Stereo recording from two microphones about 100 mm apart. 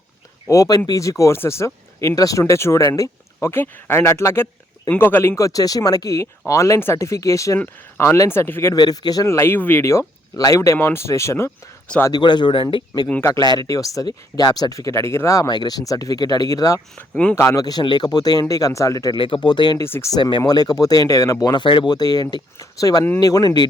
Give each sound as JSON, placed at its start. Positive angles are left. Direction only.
{"t": 0.4, "sound": "speech", "side_deg": 35}
{"t": 8.7, "sound": "speech", "side_deg": 40}
{"t": 9.2, "sound": "speech", "side_deg": 25}
{"t": 12.1, "sound": "speech", "side_deg": 50}
{"t": 19.1, "sound": "speech", "side_deg": 55}
{"t": 19.8, "sound": "speech", "side_deg": 25}
{"t": 20.1, "sound": "speech", "side_deg": 45}
{"t": 21.4, "sound": "speech", "side_deg": 50}